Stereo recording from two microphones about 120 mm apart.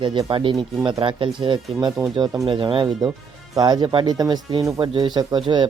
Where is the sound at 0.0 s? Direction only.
45° right (ahead or behind).